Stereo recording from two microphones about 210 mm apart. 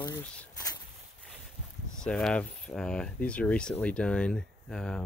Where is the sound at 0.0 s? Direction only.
15° left (ahead or behind).